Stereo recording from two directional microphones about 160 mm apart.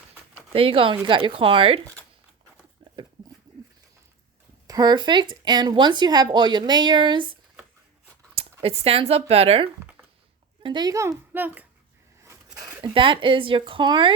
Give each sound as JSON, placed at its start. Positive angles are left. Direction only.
{"t": 0.5, "sound": "speech", "side_deg": -35}
{"t": 4.6, "sound": "speech", "side_deg": -25}
{"t": 8.4, "sound": "speech", "side_deg": -40}
{"t": 10.6, "sound": "speech", "side_deg": -30}
{"t": 12.2, "sound": "a sound", "side_deg": -20}
{"t": 12.9, "sound": "speech", "side_deg": -30}